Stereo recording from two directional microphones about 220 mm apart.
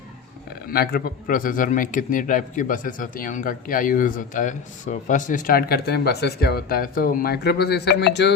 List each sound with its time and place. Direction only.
0.7 s a man's voice: 45° left (ahead or behind)